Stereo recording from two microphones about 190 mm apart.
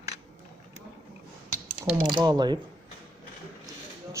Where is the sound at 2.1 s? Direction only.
20° right (ahead or behind).